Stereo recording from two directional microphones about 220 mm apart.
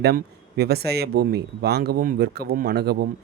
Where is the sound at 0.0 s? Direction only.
45° right (ahead or behind).